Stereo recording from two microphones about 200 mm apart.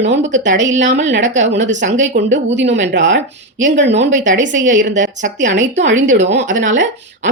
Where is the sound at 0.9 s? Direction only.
65° right (ahead or behind).